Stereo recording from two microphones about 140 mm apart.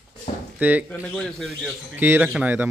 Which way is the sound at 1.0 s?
5° left (ahead or behind).